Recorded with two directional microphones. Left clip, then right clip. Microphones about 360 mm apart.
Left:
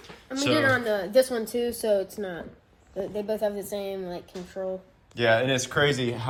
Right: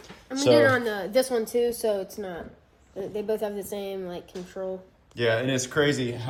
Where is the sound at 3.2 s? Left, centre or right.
Centre.